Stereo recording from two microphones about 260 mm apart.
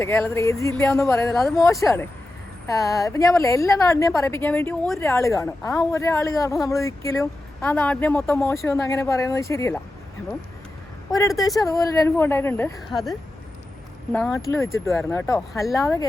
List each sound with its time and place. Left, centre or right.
0.0 s a woman's voice: centre
1.3 s speech: centre
1.5 s a woman's voice: centre
11.1 s a woman's voice: centre